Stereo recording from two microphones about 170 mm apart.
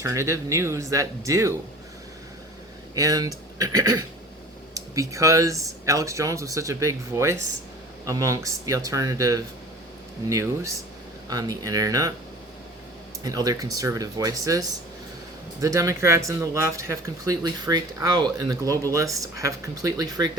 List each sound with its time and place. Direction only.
0.0 s speech: 20° right (ahead or behind)
2.9 s speech: 20° right (ahead or behind)
13.2 s speech: 20° right (ahead or behind)
15.6 s speech: 20° right (ahead or behind)